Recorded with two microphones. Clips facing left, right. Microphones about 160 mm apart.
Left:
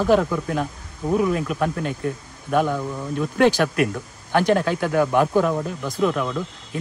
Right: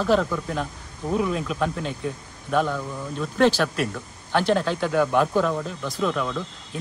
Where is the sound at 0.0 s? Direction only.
10° left (ahead or behind).